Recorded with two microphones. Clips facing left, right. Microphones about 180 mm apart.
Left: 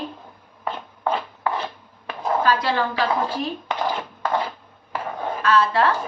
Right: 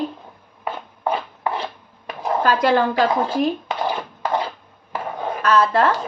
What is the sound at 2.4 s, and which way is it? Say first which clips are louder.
Speech: right 7 dB; 50° right (ahead or behind).